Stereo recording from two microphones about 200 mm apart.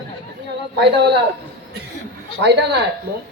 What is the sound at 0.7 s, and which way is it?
Speech, 55° right (ahead or behind).